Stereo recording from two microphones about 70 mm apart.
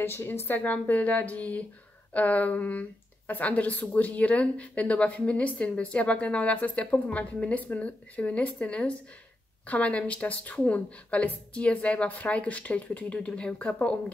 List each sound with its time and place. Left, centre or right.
0.0 s speech: left